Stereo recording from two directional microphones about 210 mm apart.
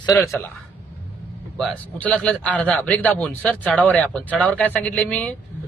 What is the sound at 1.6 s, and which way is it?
A man's voice, 5° left (ahead or behind).